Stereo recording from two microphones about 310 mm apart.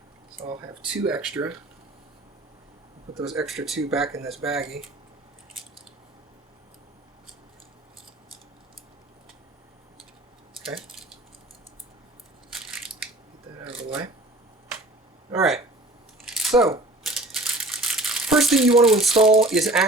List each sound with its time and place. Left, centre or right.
0.4 s speech: centre
0.9 s speech: centre
3.2 s speech: centre
10.7 s squish: centre
15.3 s a sound: centre
17.2 s crumpling: centre
19.4 s speech: centre